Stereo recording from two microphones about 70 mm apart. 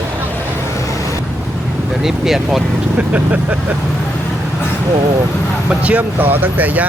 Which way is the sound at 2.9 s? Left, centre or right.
Right.